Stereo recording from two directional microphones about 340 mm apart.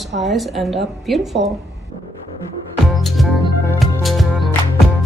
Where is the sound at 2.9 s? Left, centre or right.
Centre.